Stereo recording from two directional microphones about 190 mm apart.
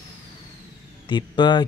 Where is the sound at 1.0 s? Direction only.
25° left (ahead or behind).